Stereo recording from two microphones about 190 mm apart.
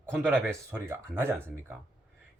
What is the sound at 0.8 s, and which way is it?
Speech, 15° right (ahead or behind).